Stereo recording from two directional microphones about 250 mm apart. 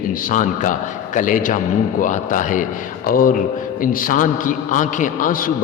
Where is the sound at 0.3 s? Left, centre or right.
Left.